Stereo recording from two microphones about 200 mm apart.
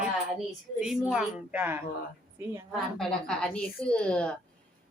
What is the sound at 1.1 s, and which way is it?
Speech, 5° right (ahead or behind).